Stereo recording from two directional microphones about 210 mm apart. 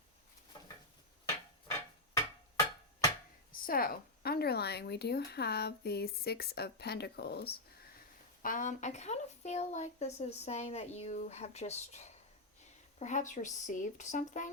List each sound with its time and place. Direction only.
3.5 s speech: 45° left (ahead or behind)
8.4 s speech: 40° left (ahead or behind)